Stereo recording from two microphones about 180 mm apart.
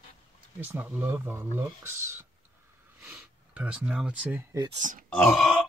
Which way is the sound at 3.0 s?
10° right (ahead or behind).